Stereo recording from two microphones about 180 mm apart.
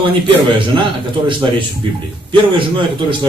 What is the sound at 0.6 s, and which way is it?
Speech, 25° right (ahead or behind).